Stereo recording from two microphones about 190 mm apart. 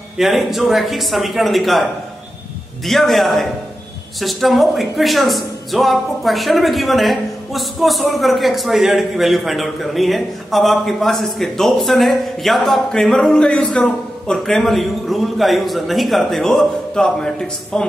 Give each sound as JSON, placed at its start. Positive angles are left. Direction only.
{"t": 0.2, "sound": "speech", "side_deg": 0}